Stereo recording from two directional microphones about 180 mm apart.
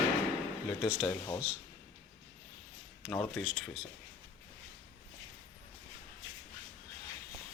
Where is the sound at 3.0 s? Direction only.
5° left (ahead or behind).